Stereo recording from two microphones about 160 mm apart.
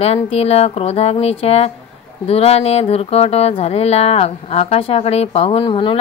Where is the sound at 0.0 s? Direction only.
40° left (ahead or behind).